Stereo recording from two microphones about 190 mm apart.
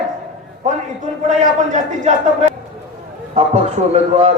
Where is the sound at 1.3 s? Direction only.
35° right (ahead or behind).